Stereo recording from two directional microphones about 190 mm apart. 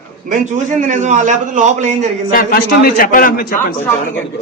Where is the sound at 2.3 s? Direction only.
50° left (ahead or behind).